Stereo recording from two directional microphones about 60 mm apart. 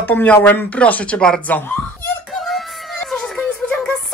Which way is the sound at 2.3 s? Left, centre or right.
Centre.